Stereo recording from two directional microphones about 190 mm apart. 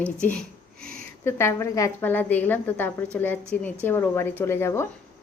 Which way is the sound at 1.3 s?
15° left (ahead or behind).